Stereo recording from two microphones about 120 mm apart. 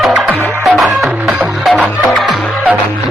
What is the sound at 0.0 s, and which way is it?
Music, centre (ahead or behind).